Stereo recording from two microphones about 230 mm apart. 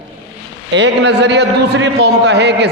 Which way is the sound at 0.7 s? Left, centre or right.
Right.